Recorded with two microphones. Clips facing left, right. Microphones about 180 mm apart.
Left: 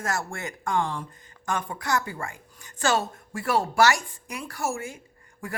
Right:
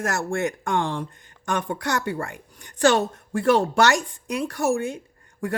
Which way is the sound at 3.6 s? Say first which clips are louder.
Right 2 dB; 75° right (ahead or behind).